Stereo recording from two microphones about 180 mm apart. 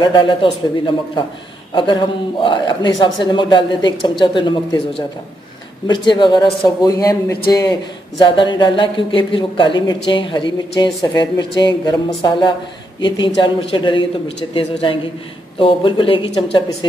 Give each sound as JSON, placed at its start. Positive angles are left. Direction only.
{"t": 0.0, "sound": "speech", "side_deg": 25}